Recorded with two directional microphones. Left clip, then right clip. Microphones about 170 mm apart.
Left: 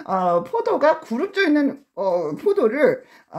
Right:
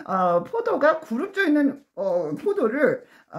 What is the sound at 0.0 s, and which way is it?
Speech, 15° left (ahead or behind).